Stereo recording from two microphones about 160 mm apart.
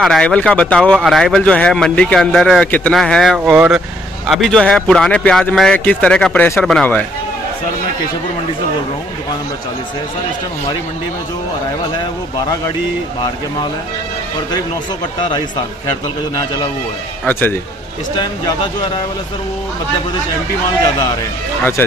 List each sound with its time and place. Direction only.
0.0 s a man's voice: 5° left (ahead or behind)
15.2 s a man's voice: 30° left (ahead or behind)
17.3 s speech: 10° left (ahead or behind)